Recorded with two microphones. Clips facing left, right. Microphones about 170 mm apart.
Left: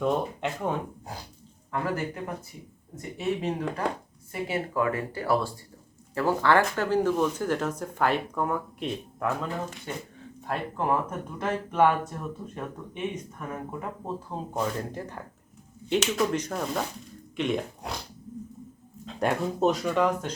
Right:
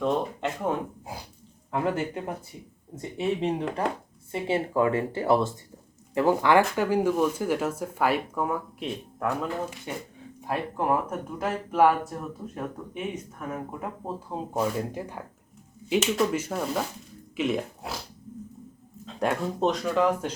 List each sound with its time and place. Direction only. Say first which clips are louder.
0.0 s speech: even; centre (ahead or behind)
2.0 s speech: right 2 dB; 25° right (ahead or behind); by 13.0 s 5° right (ahead or behind)
14.3 s speech: right 3 dB; 10° right (ahead or behind)
19.0 s speech: even; centre (ahead or behind)